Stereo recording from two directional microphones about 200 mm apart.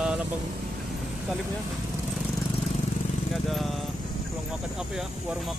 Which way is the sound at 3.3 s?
Centre (ahead or behind).